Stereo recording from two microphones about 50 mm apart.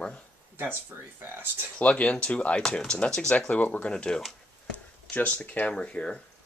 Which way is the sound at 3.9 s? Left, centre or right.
Centre.